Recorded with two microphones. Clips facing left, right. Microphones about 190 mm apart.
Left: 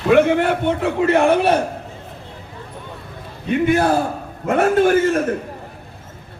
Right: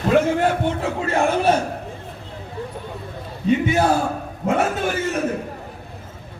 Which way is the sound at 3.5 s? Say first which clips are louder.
Left 1 dB; 55° left (ahead or behind).